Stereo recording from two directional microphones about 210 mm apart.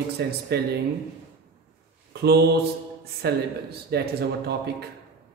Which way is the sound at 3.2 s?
50° right (ahead or behind).